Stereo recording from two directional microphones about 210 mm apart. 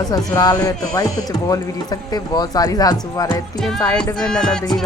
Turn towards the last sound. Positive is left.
turn(degrees=5)  # may be behind; listen again after turning